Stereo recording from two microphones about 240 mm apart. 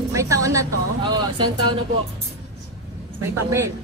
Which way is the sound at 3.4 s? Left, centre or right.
Centre.